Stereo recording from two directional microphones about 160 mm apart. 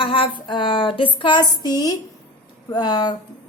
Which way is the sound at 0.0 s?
35° left (ahead or behind).